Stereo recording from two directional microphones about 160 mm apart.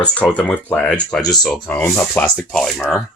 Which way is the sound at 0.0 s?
5° left (ahead or behind).